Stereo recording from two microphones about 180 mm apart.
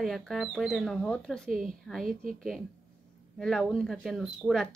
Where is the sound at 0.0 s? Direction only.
Centre (ahead or behind).